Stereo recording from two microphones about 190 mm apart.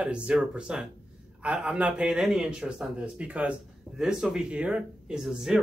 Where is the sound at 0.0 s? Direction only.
5° right (ahead or behind).